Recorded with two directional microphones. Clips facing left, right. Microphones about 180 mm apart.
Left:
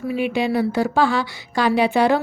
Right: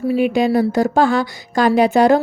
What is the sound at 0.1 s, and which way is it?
A woman's voice, 45° right (ahead or behind).